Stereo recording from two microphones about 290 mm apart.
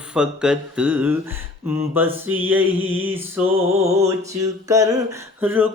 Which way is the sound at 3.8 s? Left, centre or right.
Right.